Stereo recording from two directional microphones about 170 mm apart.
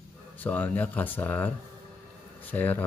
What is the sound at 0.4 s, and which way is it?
Speech, 10° left (ahead or behind).